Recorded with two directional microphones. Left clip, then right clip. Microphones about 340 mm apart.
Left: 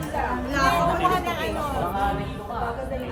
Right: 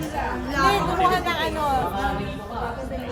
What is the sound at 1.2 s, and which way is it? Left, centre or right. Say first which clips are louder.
Speech: right 3 dB; right.